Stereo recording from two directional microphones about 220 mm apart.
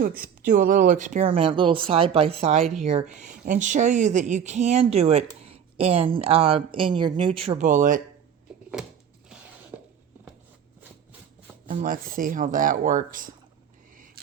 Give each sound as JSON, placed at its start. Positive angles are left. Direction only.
{"t": 0.0, "sound": "speech", "side_deg": -40}
{"t": 9.7, "sound": "a sound", "side_deg": -10}
{"t": 11.7, "sound": "speech", "side_deg": -35}